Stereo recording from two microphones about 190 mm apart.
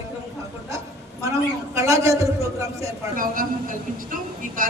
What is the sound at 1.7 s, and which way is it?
A man's voice, 15° right (ahead or behind).